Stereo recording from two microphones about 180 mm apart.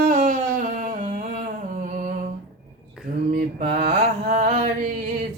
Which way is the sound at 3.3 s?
60° right (ahead or behind).